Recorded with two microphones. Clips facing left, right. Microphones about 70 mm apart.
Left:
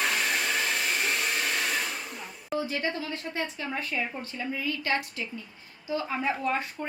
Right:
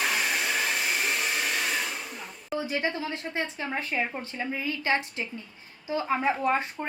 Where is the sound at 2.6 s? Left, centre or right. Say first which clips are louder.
Right 1 dB; right.